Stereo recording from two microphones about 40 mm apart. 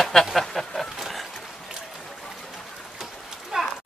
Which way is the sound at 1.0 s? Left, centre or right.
Centre.